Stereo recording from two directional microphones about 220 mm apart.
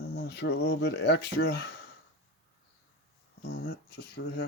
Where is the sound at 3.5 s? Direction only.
50° left (ahead or behind).